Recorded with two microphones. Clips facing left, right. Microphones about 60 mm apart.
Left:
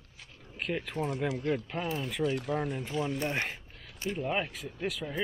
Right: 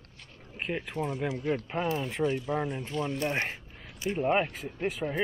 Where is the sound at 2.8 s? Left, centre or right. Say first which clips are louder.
Even; centre.